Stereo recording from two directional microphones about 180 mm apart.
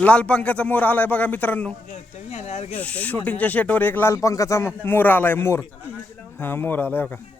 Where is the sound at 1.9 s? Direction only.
35° left (ahead or behind).